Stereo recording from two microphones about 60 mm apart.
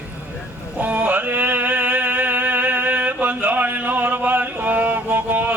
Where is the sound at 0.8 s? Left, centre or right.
Right.